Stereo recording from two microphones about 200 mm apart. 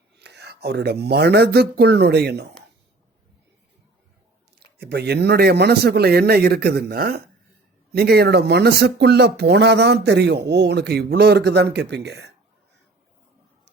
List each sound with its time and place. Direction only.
0.2 s speech: 55° right (ahead or behind)
4.6 s speech: 55° right (ahead or behind)